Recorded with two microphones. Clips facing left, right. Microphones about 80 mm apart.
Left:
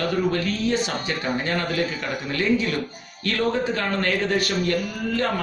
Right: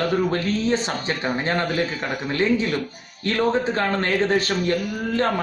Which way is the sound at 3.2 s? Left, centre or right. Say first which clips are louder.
Right 2 dB; right.